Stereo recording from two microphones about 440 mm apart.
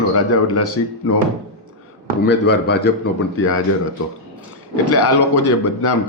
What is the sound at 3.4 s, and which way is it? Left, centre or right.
Speech, left.